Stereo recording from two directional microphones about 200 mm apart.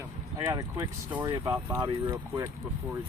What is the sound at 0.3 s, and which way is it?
Speech, 20° right (ahead or behind).